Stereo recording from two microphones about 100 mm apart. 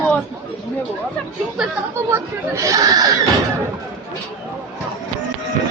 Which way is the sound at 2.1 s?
30° right (ahead or behind).